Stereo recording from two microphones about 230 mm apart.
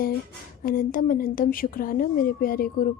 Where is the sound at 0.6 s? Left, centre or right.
Left.